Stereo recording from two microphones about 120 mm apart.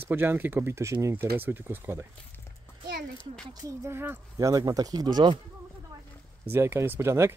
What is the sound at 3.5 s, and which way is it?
Speech, 25° right (ahead or behind).